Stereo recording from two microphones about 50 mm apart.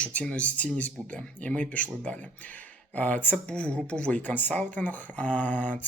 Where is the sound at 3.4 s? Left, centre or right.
Left.